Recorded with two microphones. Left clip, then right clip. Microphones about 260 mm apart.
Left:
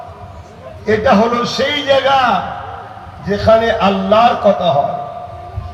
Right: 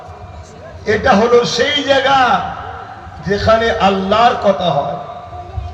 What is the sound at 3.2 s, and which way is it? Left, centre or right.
A man's voice, right.